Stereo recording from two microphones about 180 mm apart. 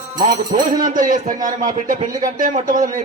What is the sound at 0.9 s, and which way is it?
A man's voice, 50° right (ahead or behind).